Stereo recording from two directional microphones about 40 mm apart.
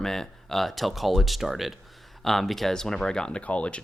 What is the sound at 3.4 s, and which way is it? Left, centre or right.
Speech, left.